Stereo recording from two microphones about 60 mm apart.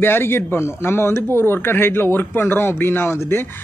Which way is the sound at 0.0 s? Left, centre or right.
Left.